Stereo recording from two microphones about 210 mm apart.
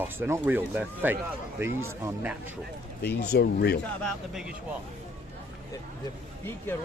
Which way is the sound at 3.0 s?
50° left (ahead or behind).